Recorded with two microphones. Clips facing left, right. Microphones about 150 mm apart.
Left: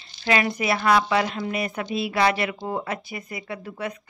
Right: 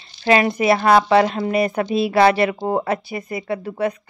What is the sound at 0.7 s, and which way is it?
A woman's voice, 40° right (ahead or behind).